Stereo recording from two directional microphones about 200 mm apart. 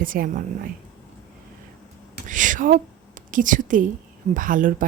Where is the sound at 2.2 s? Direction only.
40° right (ahead or behind).